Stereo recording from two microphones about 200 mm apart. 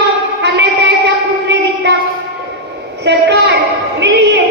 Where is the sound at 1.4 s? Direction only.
60° right (ahead or behind).